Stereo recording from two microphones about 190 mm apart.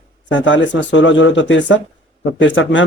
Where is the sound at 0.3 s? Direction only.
75° left (ahead or behind).